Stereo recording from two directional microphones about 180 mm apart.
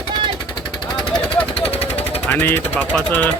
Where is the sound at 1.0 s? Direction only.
5° left (ahead or behind).